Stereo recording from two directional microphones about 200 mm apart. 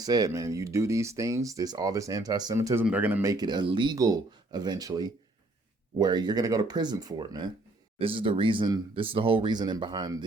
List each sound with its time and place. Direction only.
0.0 s speech: 20° right (ahead or behind)